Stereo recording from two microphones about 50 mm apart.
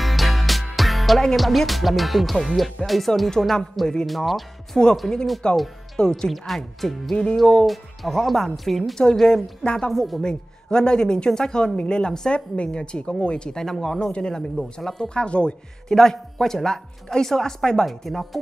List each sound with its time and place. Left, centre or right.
0.0 s music: centre
1.2 s speech: centre
5.4 s speech: centre
6.3 s speech: centre
7.6 s speech: centre
9.6 s speech: centre
9.8 s speech: centre
10.2 s speech: centre
15.0 s speech: left
15.9 s speech: centre